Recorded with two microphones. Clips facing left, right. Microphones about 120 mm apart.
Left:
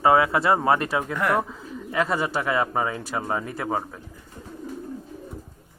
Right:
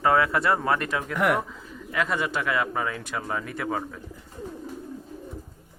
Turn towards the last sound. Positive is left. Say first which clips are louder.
# left 2 dB
turn(degrees=25)  # may be behind; listen again after turning